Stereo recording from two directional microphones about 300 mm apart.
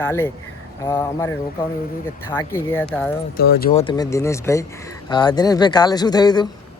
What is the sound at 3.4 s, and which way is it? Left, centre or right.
Speech, left.